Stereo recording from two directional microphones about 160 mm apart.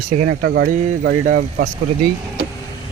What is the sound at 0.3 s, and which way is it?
Speech, 85° right.